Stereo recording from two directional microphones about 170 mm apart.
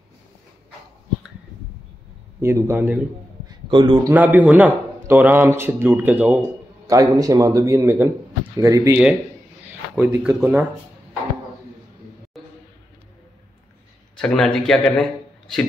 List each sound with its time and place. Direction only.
2.4 s a man's voice: 15° right (ahead or behind)
3.4 s a sound: 25° right (ahead or behind)
4.1 s a man's voice: 10° right (ahead or behind)
6.9 s a man's voice: 20° right (ahead or behind)
14.1 s speech: 5° left (ahead or behind)